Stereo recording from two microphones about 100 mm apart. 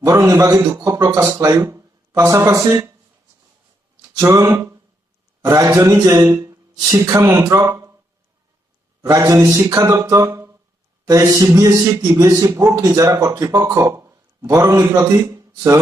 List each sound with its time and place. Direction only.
0.0 s a man's voice: 30° right (ahead or behind)
4.2 s a man's voice: 30° right (ahead or behind)
9.0 s a man's voice: 35° right (ahead or behind)